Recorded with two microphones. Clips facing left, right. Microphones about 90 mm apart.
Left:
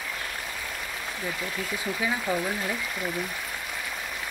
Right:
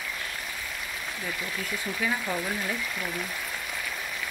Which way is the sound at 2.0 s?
15° left (ahead or behind).